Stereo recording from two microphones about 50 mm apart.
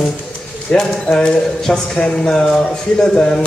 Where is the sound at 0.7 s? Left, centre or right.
Centre.